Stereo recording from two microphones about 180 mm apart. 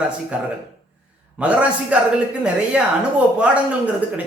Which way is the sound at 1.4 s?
5° right (ahead or behind).